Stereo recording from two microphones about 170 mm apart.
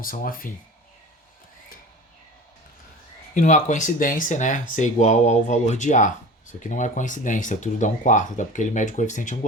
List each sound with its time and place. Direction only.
0.0 s speech: 55° left (ahead or behind)
3.3 s speech: 45° left (ahead or behind)